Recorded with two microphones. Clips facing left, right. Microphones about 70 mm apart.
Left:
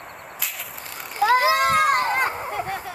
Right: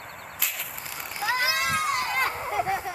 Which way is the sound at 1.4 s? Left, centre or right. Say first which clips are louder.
Left 8 dB; left.